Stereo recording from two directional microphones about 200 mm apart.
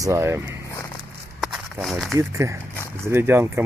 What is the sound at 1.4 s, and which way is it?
Walk, centre (ahead or behind).